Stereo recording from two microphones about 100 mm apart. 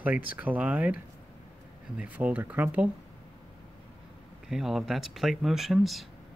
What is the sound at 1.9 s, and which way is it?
Speech, 15° right (ahead or behind).